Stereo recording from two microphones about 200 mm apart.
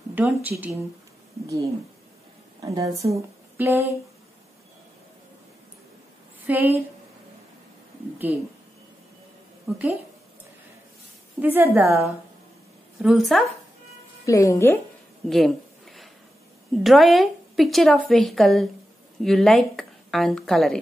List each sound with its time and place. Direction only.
0.1 s a woman's voice: 10° right (ahead or behind)
2.6 s a woman's voice: 15° right (ahead or behind)
6.4 s a woman's voice: 10° right (ahead or behind)
8.2 s a woman's voice: 10° right (ahead or behind)
11.4 s a woman's voice: 10° right (ahead or behind)
13.0 s speech: centre (ahead or behind)
14.2 s speech: 15° left (ahead or behind)
15.2 s a sound: centre (ahead or behind)
16.7 s speech: centre (ahead or behind)